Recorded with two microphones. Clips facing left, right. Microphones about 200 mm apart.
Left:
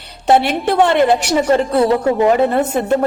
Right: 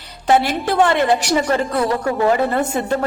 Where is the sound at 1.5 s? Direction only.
25° left (ahead or behind).